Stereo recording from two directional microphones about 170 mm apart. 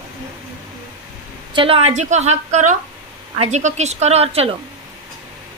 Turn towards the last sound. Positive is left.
turn(degrees=-35)  # may be behind; listen again after turning